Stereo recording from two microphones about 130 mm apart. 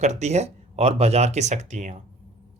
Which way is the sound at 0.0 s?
60° right (ahead or behind).